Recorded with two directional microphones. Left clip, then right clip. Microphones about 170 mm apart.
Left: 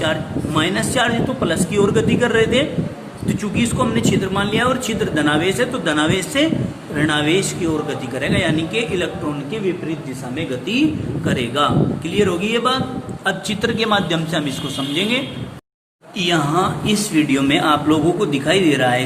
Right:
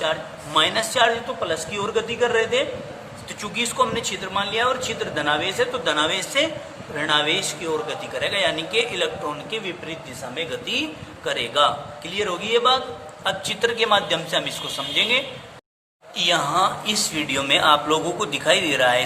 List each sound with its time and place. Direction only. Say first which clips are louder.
0.5 s speech: even; 15° right (ahead or behind)
3.2 s speech: left 4 dB; 15° right (ahead or behind)
10.3 s speech: left 4 dB; 20° right (ahead or behind)
16.1 s speech: left 2 dB; 25° right (ahead or behind)